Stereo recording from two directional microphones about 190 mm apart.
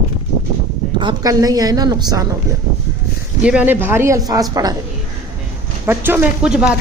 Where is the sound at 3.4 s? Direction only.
10° right (ahead or behind).